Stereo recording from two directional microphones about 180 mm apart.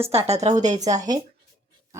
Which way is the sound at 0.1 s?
35° right (ahead or behind).